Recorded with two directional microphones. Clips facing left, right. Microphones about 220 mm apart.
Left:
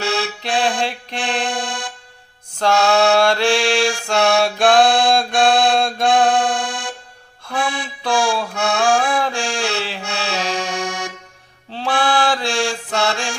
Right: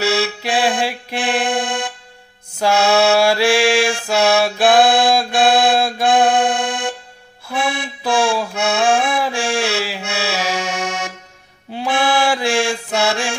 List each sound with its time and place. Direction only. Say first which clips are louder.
0.0 s music: right 4 dB; 5° right (ahead or behind)
2.6 s mantra: right 1 dB; 5° right (ahead or behind)
4.0 s music: right 1 dB; 5° right (ahead or behind)
6.6 s music: right 5 dB; 20° right (ahead or behind)
7.4 s accordion: right 1 dB; 5° right (ahead or behind)
9.0 s music: right 1 dB; 5° right (ahead or behind)
11.7 s mantra: right 1 dB; 10° right (ahead or behind)